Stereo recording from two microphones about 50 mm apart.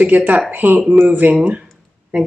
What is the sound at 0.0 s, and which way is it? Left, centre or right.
Speech, right.